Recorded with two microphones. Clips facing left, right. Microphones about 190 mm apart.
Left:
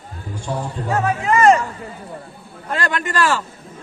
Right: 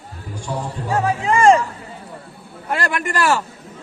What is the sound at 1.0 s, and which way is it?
Speech, 30° right (ahead or behind).